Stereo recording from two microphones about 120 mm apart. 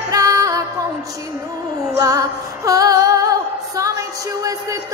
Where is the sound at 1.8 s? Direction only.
30° right (ahead or behind).